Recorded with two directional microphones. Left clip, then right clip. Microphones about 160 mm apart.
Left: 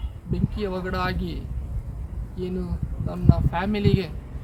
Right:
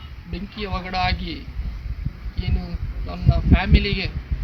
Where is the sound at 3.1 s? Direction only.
30° left (ahead or behind).